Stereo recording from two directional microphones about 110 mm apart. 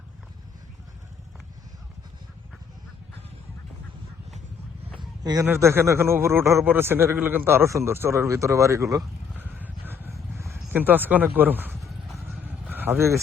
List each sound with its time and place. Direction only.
4.9 s a sound: 35° right (ahead or behind)
5.5 s a man's voice: 20° right (ahead or behind)
9.4 s a sound: 15° right (ahead or behind)
11.8 s horse: centre (ahead or behind)
12.1 s horse: 15° right (ahead or behind)
12.7 s speech: 15° right (ahead or behind)